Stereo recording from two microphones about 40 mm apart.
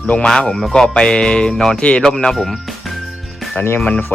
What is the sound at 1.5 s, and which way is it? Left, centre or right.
Speech, centre.